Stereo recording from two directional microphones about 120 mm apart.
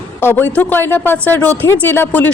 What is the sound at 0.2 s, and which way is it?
Speech, 15° left (ahead or behind).